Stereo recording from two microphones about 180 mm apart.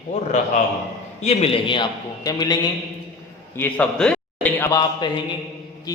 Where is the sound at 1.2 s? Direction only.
35° left (ahead or behind).